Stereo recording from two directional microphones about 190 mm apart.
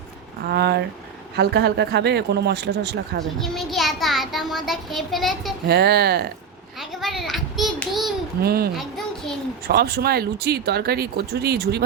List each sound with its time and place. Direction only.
0.4 s speech: 60° right (ahead or behind)
3.3 s a child's voice: centre (ahead or behind)
5.6 s speech: 60° right (ahead or behind)
7.0 s a child's voice: centre (ahead or behind)
8.4 s speech: 55° right (ahead or behind)
8.7 s a child's voice: centre (ahead or behind)
9.6 s speech: 60° right (ahead or behind)